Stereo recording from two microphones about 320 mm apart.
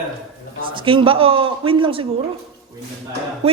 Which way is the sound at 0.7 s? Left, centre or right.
Centre.